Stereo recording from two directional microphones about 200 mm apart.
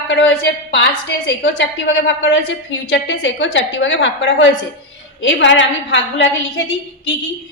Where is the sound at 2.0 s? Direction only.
65° left (ahead or behind).